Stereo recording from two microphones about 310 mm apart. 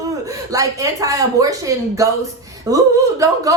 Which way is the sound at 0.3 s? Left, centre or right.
Centre.